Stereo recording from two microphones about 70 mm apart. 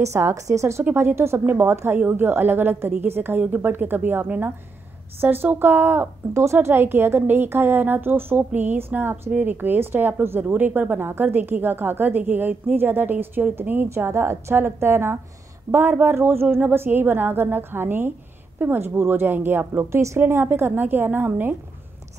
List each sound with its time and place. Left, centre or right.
0.0 s a woman's voice: right
13.8 s speech: right